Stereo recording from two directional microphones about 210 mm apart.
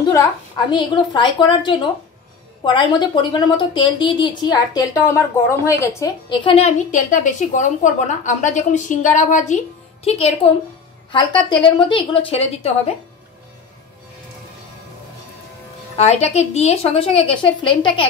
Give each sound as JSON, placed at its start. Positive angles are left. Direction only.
{"t": 0.1, "sound": "a woman's voice", "side_deg": 20}
{"t": 16.0, "sound": "a woman's voice", "side_deg": 30}